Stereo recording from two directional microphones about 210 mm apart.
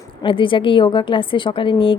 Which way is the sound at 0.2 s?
25° left (ahead or behind).